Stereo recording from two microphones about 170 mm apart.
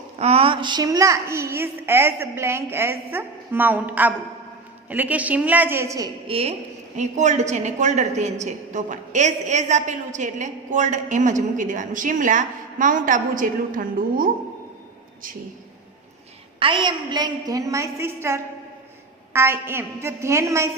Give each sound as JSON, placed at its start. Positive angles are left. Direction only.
{"t": 0.2, "sound": "a woman's voice", "side_deg": -35}
{"t": 6.2, "sound": "a woman's voice", "side_deg": -35}
{"t": 6.9, "sound": "a woman's voice", "side_deg": -45}
{"t": 16.6, "sound": "a woman's voice", "side_deg": -30}